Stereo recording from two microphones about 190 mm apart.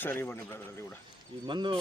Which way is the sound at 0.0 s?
10° left (ahead or behind).